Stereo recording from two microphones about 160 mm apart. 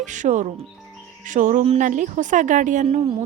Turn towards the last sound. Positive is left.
turn(degrees=-45)  # may be behind; listen again after turning